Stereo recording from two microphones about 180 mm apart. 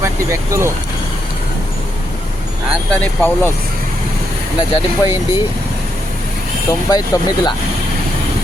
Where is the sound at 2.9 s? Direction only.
10° left (ahead or behind).